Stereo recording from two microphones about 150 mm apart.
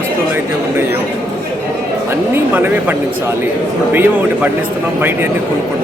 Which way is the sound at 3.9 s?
15° right (ahead or behind).